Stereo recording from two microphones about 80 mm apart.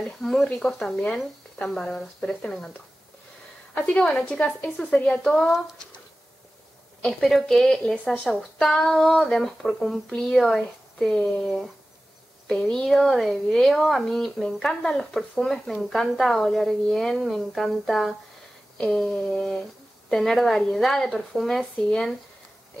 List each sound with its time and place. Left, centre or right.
0.2 s speech: centre
3.7 s a woman's voice: centre
7.1 s speech: centre
21.7 s speech: centre